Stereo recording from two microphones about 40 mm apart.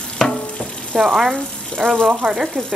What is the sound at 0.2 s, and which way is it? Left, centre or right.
Stir, centre.